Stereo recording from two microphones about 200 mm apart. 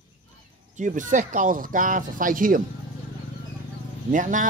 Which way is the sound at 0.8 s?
40° right (ahead or behind).